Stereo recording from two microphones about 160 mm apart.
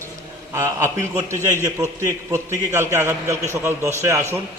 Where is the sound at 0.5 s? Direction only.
20° right (ahead or behind).